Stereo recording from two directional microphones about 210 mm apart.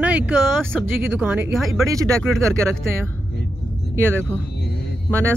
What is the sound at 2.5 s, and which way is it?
Speech, 5° left (ahead or behind).